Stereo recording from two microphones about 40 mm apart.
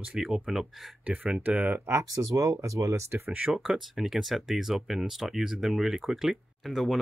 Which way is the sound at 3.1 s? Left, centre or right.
Right.